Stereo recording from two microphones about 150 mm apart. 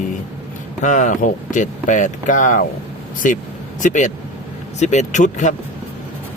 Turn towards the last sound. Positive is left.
turn(degrees=55)  # may be behind; listen again after turning